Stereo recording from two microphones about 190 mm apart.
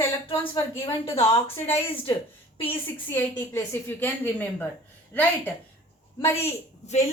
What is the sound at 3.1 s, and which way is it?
Speech, 10° left (ahead or behind).